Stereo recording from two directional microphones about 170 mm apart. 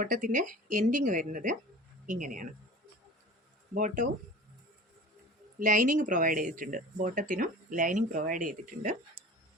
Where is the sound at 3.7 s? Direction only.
50° right (ahead or behind).